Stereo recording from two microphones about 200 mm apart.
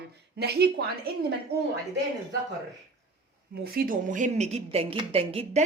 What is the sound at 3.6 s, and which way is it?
A woman's voice, 45° right (ahead or behind).